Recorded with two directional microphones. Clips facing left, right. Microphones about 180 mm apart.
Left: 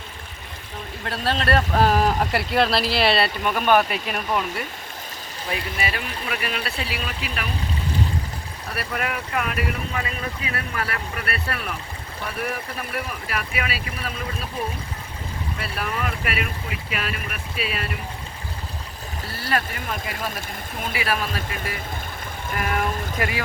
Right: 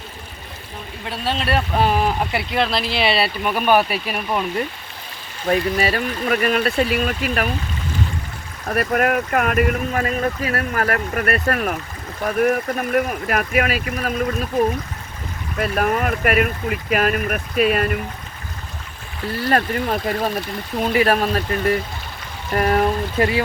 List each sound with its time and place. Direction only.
1.0 s speech: centre (ahead or behind)
5.5 s speech: 40° right (ahead or behind)
8.6 s speech: 55° right (ahead or behind)
15.5 s speech: 50° right (ahead or behind)
19.4 s speech: 45° right (ahead or behind)
23.1 s speech: 25° right (ahead or behind)